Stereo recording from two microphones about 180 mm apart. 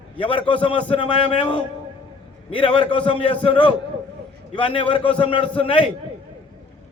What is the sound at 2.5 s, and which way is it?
A man's voice, 30° left (ahead or behind).